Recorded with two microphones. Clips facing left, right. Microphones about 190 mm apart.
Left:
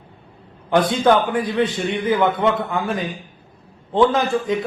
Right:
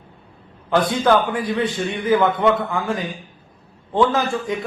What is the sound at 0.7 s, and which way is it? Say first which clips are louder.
A man's voice: left 1 dB; 20° left (ahead or behind).